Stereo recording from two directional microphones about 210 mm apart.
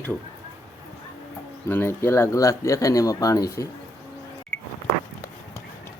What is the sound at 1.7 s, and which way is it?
Speech, 10° left (ahead or behind).